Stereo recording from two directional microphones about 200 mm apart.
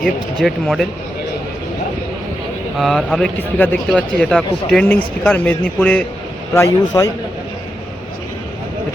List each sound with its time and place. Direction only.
0.0 s speech: centre (ahead or behind)
2.7 s a man's voice: centre (ahead or behind); by 7.1 s 15° left (ahead or behind)